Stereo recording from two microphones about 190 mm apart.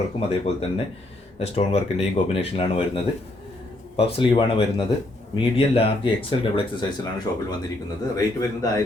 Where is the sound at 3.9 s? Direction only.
25° left (ahead or behind).